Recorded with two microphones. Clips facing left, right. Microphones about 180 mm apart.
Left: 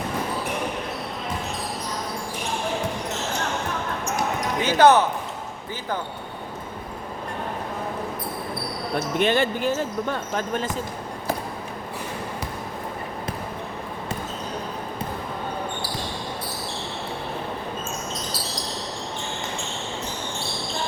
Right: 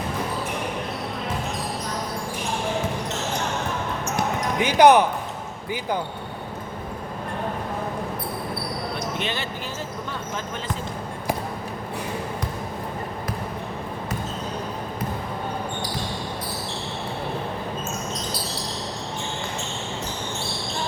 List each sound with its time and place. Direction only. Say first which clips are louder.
4.6 s speech: right 1 dB; 15° right (ahead or behind)
9.1 s speech: left 8 dB; 50° left (ahead or behind)